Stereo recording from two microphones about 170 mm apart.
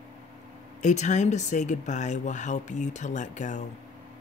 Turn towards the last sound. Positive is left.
turn(degrees=45)  # may be behind; listen again after turning